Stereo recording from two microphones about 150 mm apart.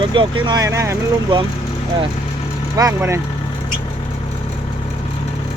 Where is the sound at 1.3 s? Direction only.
35° right (ahead or behind).